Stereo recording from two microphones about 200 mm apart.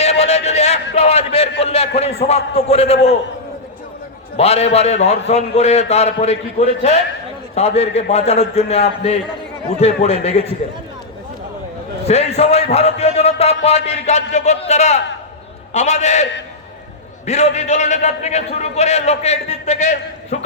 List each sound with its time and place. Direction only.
0.0 s a sound: 30° left (ahead or behind)
2.0 s a man's voice: 30° left (ahead or behind)
4.4 s a man's voice: 30° left (ahead or behind)
12.0 s a man's voice: 30° left (ahead or behind)
17.2 s a man's voice: 35° left (ahead or behind)